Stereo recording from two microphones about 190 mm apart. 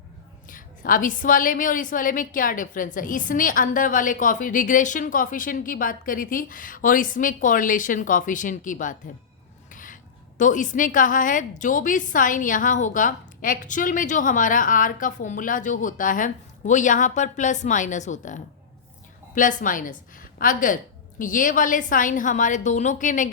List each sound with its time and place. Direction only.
0.4 s a woman's voice: 45° left (ahead or behind)